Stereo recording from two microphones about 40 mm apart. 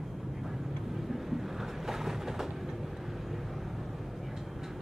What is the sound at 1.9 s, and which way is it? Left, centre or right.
Train, centre.